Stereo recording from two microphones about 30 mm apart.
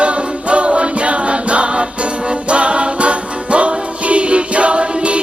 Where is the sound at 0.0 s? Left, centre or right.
Right.